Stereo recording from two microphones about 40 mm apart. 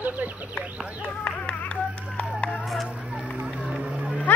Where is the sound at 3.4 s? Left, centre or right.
Right.